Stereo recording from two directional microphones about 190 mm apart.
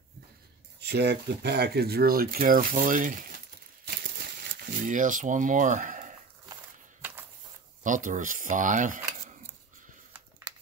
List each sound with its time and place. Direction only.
0.7 s speech: 60° right (ahead or behind); by 3.3 s 45° right (ahead or behind)
4.4 s speech: 50° right (ahead or behind)
7.8 s speech: 45° right (ahead or behind)